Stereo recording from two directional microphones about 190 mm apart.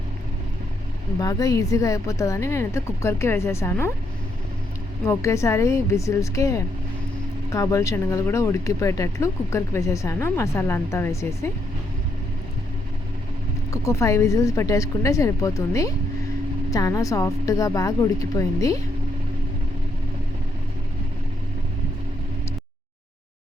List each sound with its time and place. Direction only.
1.2 s speech: 20° left (ahead or behind)
5.0 s speech: 15° left (ahead or behind)
13.7 s speech: 15° left (ahead or behind)